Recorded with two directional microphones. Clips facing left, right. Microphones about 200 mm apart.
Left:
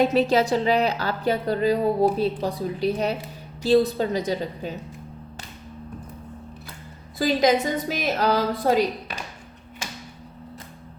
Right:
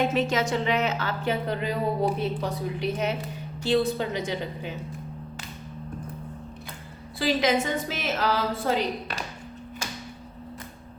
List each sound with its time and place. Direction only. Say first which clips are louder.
0.0 s speech: left 5 dB; 35° left (ahead or behind)
7.2 s speech: left 4 dB; 40° left (ahead or behind)